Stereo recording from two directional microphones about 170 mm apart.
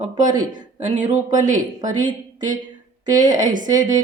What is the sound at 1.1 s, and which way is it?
Speech, 50° right (ahead or behind).